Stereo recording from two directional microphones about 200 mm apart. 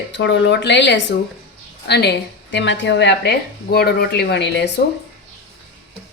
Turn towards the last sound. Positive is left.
turn(degrees=60)  # may be behind; listen again after turning